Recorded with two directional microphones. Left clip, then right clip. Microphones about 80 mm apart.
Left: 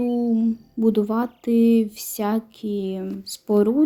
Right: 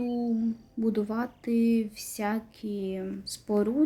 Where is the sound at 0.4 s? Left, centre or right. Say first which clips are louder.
Left 9 dB; left.